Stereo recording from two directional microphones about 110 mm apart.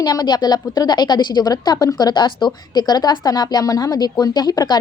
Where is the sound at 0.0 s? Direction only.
35° left (ahead or behind).